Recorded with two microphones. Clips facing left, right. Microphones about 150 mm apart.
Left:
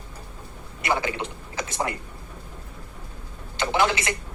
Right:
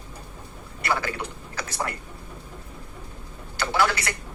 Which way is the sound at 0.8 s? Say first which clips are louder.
Left 2 dB; 20° left (ahead or behind).